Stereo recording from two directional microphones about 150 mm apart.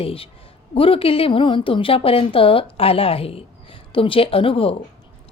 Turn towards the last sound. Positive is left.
turn(degrees=40)  # may be behind; listen again after turning